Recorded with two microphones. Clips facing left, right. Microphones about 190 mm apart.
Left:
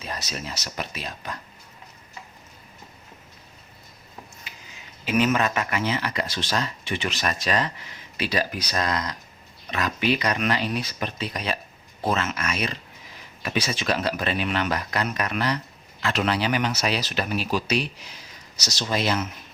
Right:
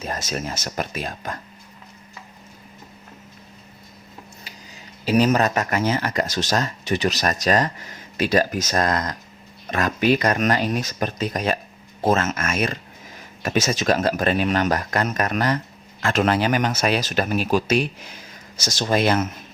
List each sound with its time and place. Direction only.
0.0 s speech: 50° right (ahead or behind)
4.5 s a sound: 35° right (ahead or behind)
5.0 s speech: 35° right (ahead or behind); by 19.3 s 55° right (ahead or behind)